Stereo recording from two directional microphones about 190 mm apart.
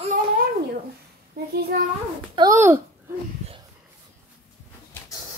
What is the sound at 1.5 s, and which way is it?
Speech, 55° right (ahead or behind).